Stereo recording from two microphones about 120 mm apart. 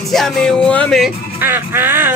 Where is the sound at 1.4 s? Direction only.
15° right (ahead or behind).